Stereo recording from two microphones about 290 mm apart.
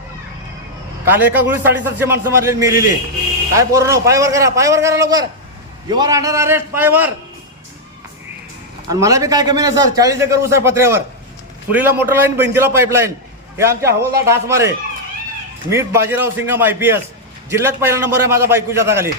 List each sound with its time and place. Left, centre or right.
1.0 s a man's voice: centre
8.9 s a man's voice: centre
15.7 s a man's voice: centre